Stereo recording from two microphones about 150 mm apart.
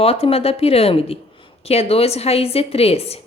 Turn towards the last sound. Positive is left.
turn(degrees=40)  # may be behind; listen again after turning